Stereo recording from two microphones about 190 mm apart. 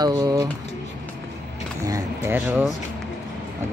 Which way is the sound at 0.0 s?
15° right (ahead or behind).